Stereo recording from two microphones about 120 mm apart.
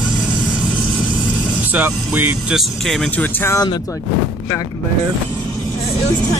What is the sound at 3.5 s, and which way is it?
Speech, 35° left (ahead or behind).